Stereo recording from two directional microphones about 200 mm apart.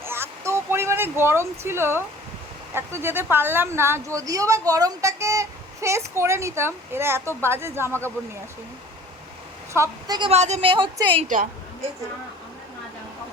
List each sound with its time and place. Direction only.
0.0 s a sound: 10° right (ahead or behind)
2.7 s a woman's voice: 10° right (ahead or behind)
9.7 s a woman's voice: 15° right (ahead or behind)